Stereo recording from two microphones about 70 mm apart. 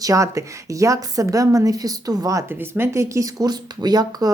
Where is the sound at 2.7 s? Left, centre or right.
Right.